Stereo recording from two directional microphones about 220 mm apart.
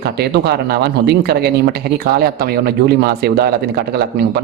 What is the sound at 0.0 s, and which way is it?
Speech, 45° right (ahead or behind).